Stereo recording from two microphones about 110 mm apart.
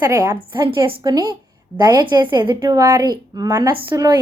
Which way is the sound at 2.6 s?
30° right (ahead or behind).